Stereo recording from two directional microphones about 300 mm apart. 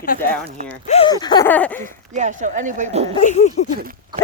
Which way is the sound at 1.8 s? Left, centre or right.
Right.